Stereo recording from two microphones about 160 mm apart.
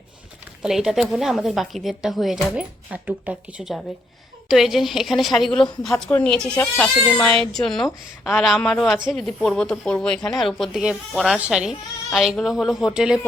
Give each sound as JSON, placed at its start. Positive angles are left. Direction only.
{"t": 0.6, "sound": "speech", "side_deg": -5}